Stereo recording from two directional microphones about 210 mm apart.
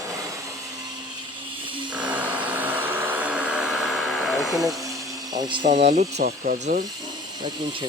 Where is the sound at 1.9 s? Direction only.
5° right (ahead or behind).